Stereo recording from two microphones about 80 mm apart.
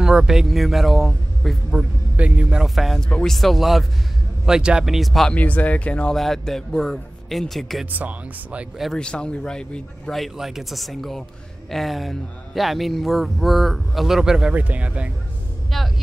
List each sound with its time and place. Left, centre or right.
0.0 s speech: centre
1.8 s a man's voice: centre
2.6 s speech: centre
3.1 s speech: centre
3.3 s speech: centre
5.3 s speech: centre
6.1 s speech: centre
7.8 s speech: right
8.9 s speech: centre
14.5 s speech: centre
15.7 s speech: centre